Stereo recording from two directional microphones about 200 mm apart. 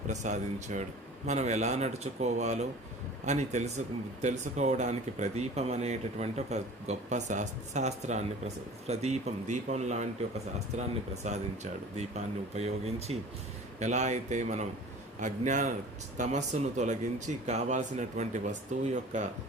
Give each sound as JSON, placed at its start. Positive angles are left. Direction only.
{"t": 0.1, "sound": "speech", "side_deg": -35}